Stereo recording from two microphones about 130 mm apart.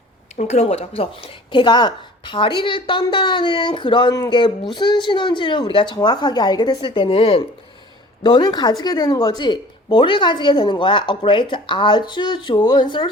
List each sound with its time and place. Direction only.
0.3 s speech: 60° left (ahead or behind); by 13.1 s 35° left (ahead or behind)